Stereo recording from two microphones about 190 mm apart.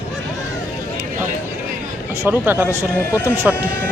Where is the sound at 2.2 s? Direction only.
10° right (ahead or behind).